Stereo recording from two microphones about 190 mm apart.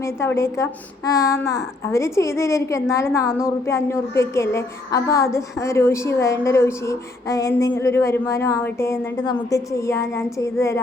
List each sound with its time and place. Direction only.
0.0 s child singing: 15° left (ahead or behind)